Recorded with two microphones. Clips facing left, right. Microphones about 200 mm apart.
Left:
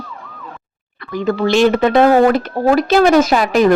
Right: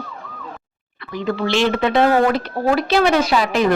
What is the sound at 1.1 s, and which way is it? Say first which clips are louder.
Speech: left 5 dB; 45° left (ahead or behind).